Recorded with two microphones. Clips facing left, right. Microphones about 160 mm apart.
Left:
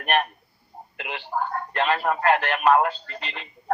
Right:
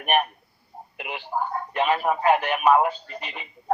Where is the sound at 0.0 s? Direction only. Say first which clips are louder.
Right 1 dB; 5° right (ahead or behind).